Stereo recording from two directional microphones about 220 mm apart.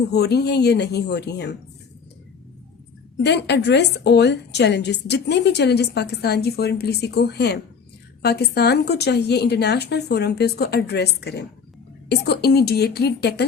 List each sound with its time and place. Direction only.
0.1 s a woman's voice: 50° left (ahead or behind)
3.2 s a woman's voice: 50° left (ahead or behind)